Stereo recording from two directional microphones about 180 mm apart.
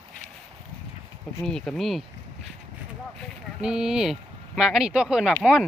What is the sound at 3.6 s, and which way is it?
Speech, 5° right (ahead or behind).